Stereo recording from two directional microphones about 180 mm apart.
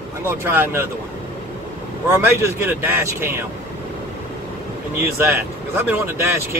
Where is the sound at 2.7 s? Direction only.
10° right (ahead or behind).